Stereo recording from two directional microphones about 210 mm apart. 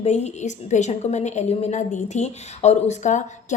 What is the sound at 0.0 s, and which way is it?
A woman's voice, 30° left (ahead or behind).